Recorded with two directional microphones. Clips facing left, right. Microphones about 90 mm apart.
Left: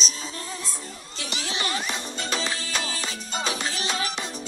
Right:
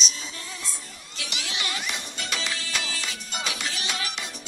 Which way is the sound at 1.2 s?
35° left (ahead or behind).